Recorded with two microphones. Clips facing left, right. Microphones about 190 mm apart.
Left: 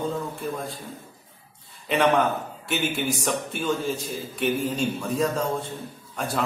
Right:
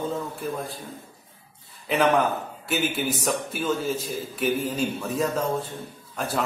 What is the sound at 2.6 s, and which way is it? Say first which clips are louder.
A man's voice: right 1 dB; 5° right (ahead or behind).